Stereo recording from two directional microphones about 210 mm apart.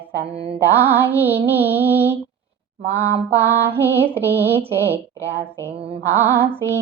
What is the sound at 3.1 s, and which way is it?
Mantra, 50° right (ahead or behind).